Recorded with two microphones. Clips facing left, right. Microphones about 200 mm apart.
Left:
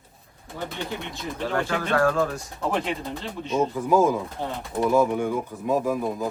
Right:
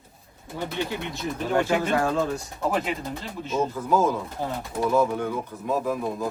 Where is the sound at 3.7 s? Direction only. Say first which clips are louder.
Left 3 dB; 10° left (ahead or behind).